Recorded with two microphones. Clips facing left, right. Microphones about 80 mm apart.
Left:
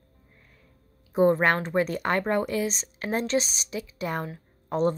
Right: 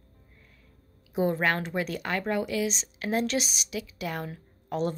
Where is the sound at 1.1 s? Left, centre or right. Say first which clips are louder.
Left 5 dB; left.